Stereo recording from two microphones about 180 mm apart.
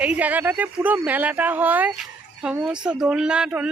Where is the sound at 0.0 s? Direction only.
10° right (ahead or behind).